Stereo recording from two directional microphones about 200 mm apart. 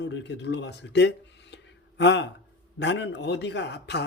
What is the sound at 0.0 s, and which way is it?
A man's voice, 60° left (ahead or behind).